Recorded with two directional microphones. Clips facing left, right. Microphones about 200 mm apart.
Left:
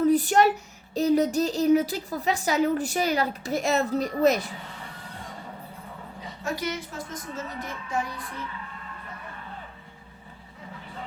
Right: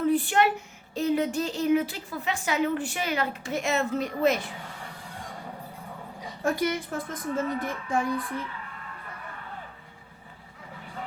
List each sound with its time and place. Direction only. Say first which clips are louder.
0.1 s speech: left 3 dB; 40° left (ahead or behind)
6.4 s a woman's voice: right 4 dB; 50° right (ahead or behind)